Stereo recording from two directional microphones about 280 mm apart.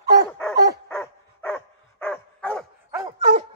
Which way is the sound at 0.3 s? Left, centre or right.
Centre.